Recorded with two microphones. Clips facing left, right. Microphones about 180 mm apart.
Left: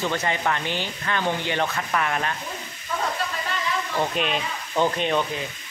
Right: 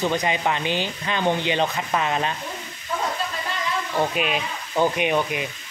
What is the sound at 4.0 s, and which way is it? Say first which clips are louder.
Speech: right 2 dB; 5° right (ahead or behind).